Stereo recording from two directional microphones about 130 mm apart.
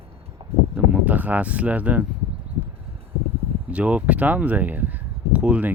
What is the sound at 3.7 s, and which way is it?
Speech, 10° right (ahead or behind).